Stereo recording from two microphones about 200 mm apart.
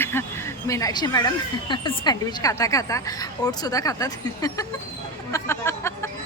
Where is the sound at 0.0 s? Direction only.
10° left (ahead or behind).